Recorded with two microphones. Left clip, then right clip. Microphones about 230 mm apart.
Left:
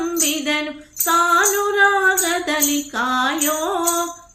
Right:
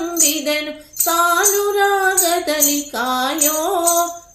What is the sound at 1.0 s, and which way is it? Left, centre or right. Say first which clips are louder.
Female singing: even; centre.